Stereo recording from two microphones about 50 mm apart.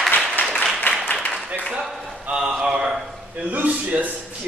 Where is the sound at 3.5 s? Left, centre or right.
Right.